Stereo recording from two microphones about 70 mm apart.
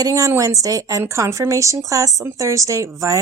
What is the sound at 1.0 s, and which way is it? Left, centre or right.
Speech, right.